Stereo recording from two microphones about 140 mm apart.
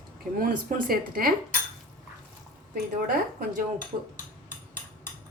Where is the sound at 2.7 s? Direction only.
90° right.